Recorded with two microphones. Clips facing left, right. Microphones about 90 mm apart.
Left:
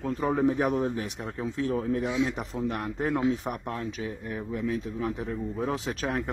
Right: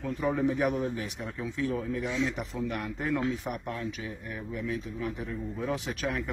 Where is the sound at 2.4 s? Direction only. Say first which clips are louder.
Left 2 dB; 35° left (ahead or behind).